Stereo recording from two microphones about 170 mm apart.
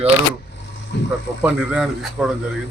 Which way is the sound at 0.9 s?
90° left.